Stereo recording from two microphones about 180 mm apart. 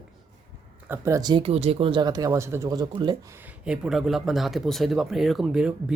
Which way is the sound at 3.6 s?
5° right (ahead or behind).